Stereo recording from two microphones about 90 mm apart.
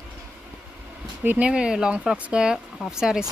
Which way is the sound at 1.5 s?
10° right (ahead or behind).